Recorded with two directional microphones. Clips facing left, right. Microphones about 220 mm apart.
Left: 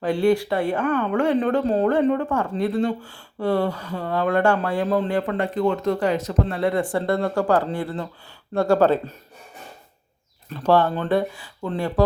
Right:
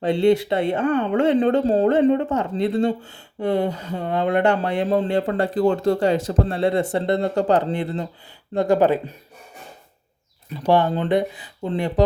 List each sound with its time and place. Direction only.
0.0 s speech: 25° right (ahead or behind)
10.5 s speech: 15° right (ahead or behind)